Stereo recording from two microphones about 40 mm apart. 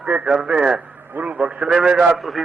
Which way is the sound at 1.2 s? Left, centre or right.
Right.